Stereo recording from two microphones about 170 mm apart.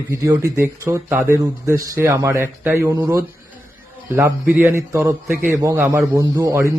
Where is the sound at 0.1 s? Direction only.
15° right (ahead or behind).